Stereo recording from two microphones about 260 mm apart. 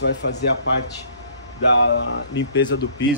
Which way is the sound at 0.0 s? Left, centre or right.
Left.